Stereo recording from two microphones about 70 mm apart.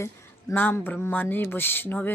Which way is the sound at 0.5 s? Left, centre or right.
Left.